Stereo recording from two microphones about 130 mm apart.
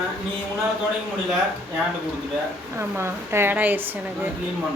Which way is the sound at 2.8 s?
20° right (ahead or behind).